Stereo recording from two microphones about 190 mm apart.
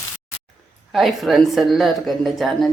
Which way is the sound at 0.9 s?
Centre (ahead or behind).